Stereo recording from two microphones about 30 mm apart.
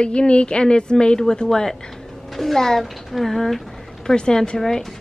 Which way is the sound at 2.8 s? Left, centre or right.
Centre.